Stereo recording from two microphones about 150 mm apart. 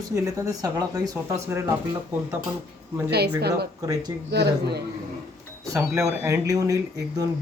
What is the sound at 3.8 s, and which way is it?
Speech, 25° right (ahead or behind).